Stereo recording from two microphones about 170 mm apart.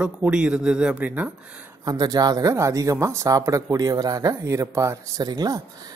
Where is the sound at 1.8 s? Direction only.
20° right (ahead or behind).